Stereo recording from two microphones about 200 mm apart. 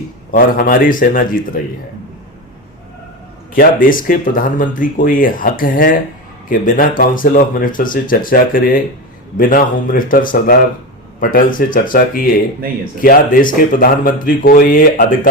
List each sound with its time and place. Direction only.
0.3 s speech: 45° left (ahead or behind)
3.5 s speech: 45° left (ahead or behind)